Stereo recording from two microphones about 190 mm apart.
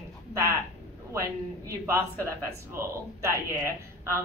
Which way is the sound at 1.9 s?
15° right (ahead or behind).